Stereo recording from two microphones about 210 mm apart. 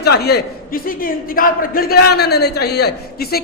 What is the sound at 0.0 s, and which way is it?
A man's voice, 50° left (ahead or behind).